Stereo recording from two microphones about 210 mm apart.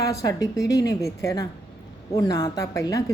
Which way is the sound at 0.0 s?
15° left (ahead or behind).